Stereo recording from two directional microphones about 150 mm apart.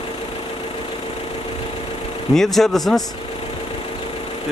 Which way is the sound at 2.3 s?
Centre (ahead or behind).